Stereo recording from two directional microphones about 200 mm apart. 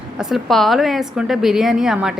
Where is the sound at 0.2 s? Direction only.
Centre (ahead or behind).